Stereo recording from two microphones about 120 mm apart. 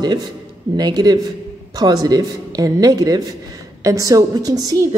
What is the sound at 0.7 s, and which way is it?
A woman's voice, 35° right (ahead or behind).